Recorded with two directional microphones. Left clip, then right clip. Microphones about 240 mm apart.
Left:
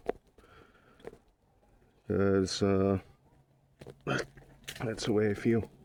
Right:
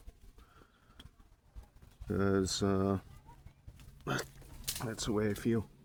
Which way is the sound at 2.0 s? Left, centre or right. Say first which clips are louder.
Left 4 dB; left.